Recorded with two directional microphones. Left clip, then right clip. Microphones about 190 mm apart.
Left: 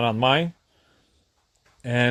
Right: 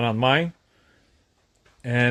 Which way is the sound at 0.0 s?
10° left (ahead or behind).